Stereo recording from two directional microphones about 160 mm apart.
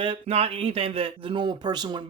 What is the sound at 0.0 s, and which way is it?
Speech, 35° right (ahead or behind).